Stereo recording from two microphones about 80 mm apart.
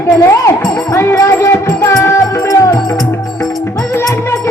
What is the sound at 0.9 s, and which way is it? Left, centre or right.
Music, left.